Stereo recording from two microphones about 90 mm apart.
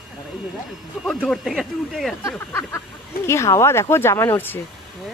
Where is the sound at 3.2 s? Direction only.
30° left (ahead or behind).